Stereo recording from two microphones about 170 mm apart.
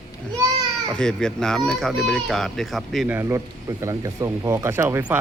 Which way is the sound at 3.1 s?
15° right (ahead or behind).